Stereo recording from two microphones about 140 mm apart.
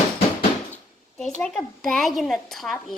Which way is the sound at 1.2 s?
5° left (ahead or behind).